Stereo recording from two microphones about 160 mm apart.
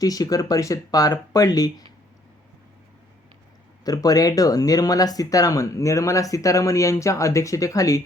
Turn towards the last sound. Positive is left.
turn(degrees=20)  # may be behind; listen again after turning